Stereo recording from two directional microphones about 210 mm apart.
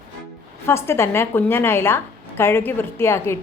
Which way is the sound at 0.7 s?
10° left (ahead or behind).